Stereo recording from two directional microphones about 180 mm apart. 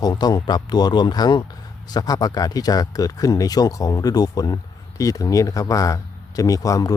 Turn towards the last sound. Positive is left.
turn(degrees=20)  # may be behind; listen again after turning